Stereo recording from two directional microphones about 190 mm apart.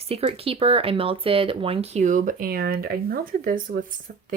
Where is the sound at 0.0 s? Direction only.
30° right (ahead or behind).